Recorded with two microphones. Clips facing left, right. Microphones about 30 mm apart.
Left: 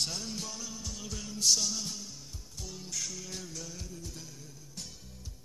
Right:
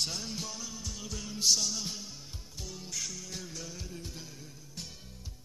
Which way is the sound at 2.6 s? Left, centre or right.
Centre.